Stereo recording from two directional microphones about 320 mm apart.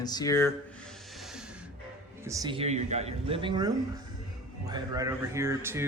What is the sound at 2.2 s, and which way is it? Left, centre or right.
Speech, centre.